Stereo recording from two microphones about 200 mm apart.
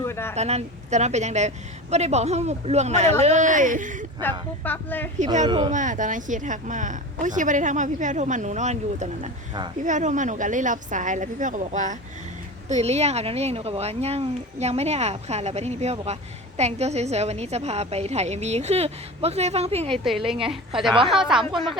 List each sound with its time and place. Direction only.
0.0 s a woman's voice: 10° left (ahead or behind)
0.3 s a woman's voice: 35° right (ahead or behind)
4.2 s speech: 10° left (ahead or behind)
5.2 s a woman's voice: 35° right (ahead or behind)
5.5 s speech: 20° right (ahead or behind)
5.7 s a woman's voice: 40° right (ahead or behind)
19.9 s a woman's voice: centre (ahead or behind)